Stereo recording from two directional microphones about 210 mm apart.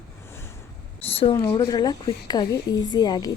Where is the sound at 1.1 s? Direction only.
25° left (ahead or behind).